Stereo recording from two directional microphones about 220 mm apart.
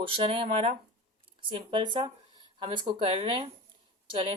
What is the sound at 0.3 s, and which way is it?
Speech, 25° right (ahead or behind).